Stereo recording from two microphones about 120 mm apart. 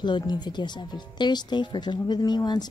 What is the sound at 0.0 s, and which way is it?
Speech, 40° left (ahead or behind).